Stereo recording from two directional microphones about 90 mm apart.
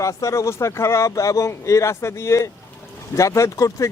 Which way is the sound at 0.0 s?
35° left (ahead or behind).